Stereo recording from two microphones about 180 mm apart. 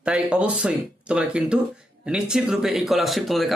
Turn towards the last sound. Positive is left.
turn(degrees=0)  # may be behind; listen again after turning